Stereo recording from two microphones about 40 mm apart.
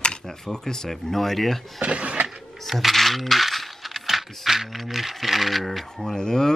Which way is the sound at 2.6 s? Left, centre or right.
Centre.